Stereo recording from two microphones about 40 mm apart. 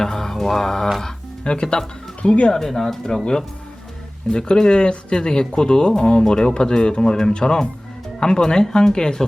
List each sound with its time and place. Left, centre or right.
0.0 s mantra: centre
1.0 s speech: centre
2.5 s speech: centre